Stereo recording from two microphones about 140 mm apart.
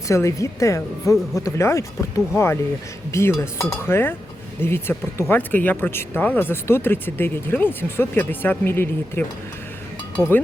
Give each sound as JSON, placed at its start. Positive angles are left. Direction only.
{"t": 0.1, "sound": "speech", "side_deg": 20}